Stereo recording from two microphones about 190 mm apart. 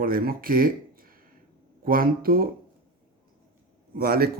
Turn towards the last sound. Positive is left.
turn(degrees=-50)  # may be behind; listen again after turning